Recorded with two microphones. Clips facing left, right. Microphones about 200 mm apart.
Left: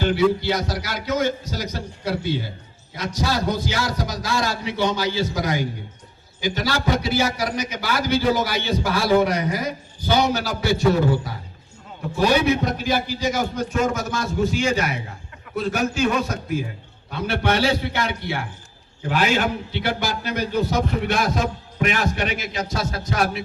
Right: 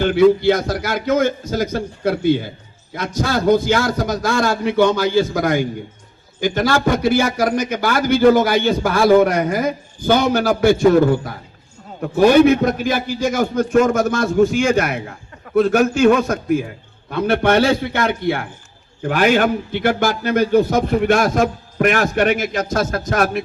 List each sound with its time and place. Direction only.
0.0 s a man's voice: 50° right (ahead or behind)